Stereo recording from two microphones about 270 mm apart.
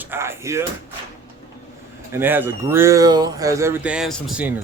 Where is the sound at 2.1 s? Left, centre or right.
Centre.